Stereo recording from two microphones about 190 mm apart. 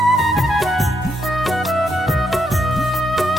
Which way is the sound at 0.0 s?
Centre (ahead or behind).